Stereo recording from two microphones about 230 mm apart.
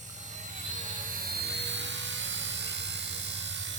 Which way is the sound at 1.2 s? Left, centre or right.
Right.